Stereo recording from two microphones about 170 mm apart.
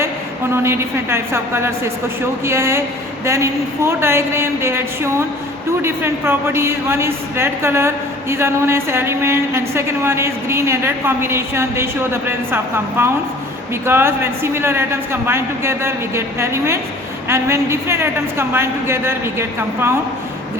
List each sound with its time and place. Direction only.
0.5 s a woman's voice: 15° right (ahead or behind)